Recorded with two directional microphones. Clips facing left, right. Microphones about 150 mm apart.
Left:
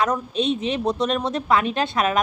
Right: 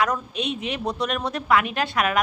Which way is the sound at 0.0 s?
25° left (ahead or behind).